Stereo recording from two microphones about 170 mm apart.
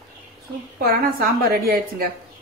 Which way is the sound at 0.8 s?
65° right (ahead or behind).